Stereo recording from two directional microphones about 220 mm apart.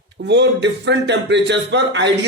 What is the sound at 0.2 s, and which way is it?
A man's voice, 50° right (ahead or behind).